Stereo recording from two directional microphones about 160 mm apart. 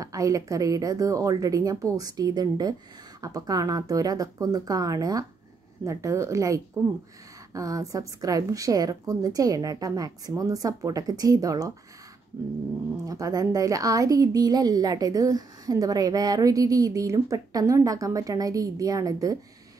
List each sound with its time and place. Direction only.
0.0 s a woman's voice: 20° right (ahead or behind)
13.0 s a woman's voice: 20° right (ahead or behind)